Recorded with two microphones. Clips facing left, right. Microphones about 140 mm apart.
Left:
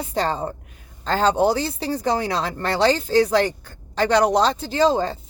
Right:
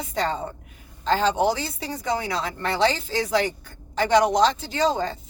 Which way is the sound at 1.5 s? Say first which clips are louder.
Left 5 dB; 35° left (ahead or behind).